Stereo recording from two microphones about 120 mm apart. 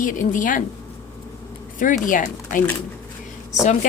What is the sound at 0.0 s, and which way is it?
Speech, 90° left.